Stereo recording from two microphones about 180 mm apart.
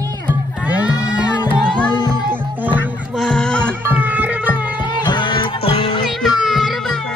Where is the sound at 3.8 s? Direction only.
10° right (ahead or behind).